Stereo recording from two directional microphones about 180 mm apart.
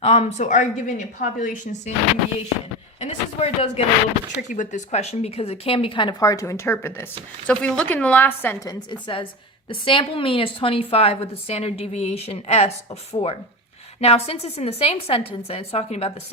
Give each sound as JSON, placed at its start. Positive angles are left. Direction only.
{"t": 0.0, "sound": "a woman's voice", "side_deg": 35}
{"t": 3.0, "sound": "a woman's voice", "side_deg": 35}
{"t": 8.9, "sound": "a woman's voice", "side_deg": 25}